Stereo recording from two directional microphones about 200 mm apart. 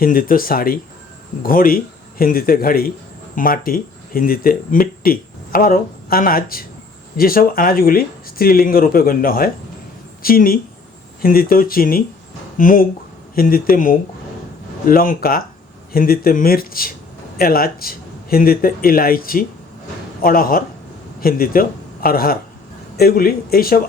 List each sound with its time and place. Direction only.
0.0 s a man's voice: 45° left (ahead or behind)